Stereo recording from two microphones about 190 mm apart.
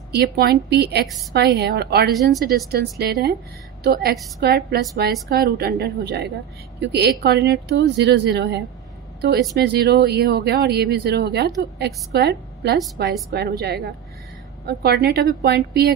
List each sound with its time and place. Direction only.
0.1 s speech: 55° right (ahead or behind)